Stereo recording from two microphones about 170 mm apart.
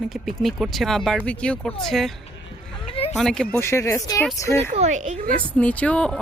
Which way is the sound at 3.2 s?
5° left (ahead or behind).